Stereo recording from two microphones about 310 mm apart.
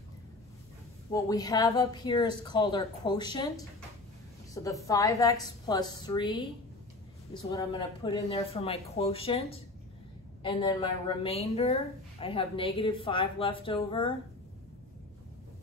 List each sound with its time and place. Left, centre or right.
1.1 s a woman's voice: centre
4.6 s a woman's voice: centre